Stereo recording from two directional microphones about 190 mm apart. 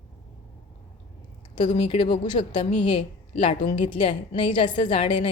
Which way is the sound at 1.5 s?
25° left (ahead or behind).